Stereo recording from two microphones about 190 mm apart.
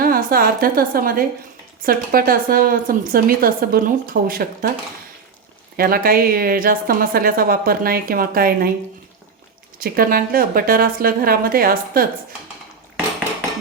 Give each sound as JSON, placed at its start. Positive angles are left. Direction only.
{"t": 0.0, "sound": "a woman's voice", "side_deg": -50}
{"t": 5.7, "sound": "a woman's voice", "side_deg": -50}
{"t": 9.7, "sound": "a woman's voice", "side_deg": -50}